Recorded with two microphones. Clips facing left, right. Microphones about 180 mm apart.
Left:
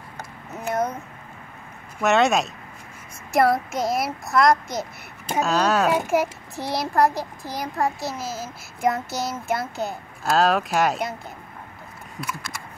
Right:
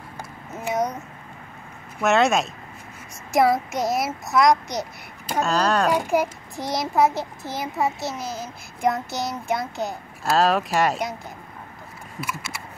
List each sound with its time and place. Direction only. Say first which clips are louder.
0.5 s speech: even; centre (ahead or behind)
2.0 s a child's voice: even; centre (ahead or behind)
6.5 s a child's voice: right 1 dB; 20° right (ahead or behind)
6.9 s a child's voice: even; centre (ahead or behind)
7.2 s a child's voice: right 1 dB; 20° right (ahead or behind)
7.6 s a child's voice: even; 5° right (ahead or behind)
12.2 s a child's voice: right 1 dB; 5° right (ahead or behind)